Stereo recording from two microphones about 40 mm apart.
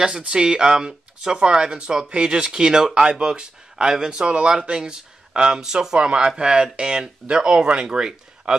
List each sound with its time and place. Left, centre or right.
0.2 s speech: right